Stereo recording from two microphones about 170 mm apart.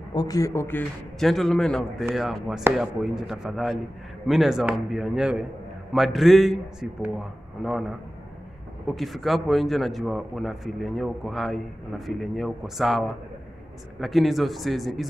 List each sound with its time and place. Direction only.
0.1 s speech: 25° left (ahead or behind)
1.2 s a man's voice: centre (ahead or behind)